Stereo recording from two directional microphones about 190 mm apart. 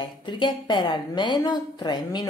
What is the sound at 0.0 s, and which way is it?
A woman's voice, 25° left (ahead or behind).